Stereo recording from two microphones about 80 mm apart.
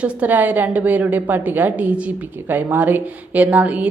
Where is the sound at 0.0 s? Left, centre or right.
Right.